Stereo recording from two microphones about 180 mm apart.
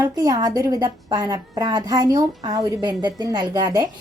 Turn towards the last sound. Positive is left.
turn(degrees=-20)  # may be behind; listen again after turning